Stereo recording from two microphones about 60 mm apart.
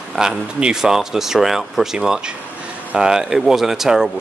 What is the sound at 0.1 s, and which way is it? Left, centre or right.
Speech, centre.